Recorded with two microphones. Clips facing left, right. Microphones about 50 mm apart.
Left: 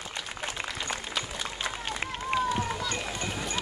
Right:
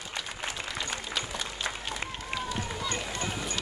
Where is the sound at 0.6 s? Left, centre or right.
Left.